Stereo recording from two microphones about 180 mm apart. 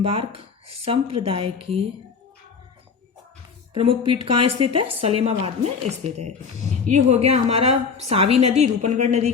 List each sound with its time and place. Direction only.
0.0 s a woman's voice: 30° right (ahead or behind)
3.8 s a woman's voice: 30° right (ahead or behind)